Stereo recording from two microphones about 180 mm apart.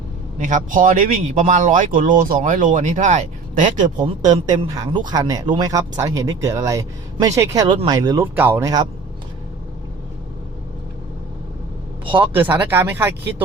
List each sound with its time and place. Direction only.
0.3 s speech: 45° right (ahead or behind)
4.5 s speech: 25° right (ahead or behind)
12.0 s speech: 25° right (ahead or behind)
12.3 s speech: 10° right (ahead or behind)